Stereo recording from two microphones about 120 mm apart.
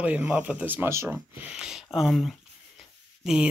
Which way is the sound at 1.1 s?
5° right (ahead or behind).